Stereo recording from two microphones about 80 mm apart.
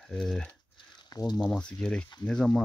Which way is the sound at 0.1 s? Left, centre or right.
Centre.